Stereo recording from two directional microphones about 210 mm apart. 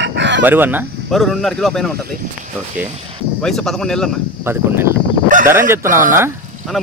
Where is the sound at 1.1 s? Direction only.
Centre (ahead or behind).